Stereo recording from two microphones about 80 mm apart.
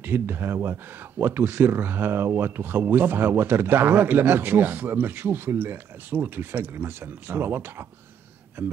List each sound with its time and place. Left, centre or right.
0.0 s speech: right